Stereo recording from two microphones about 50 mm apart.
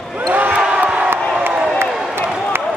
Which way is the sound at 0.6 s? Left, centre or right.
Centre.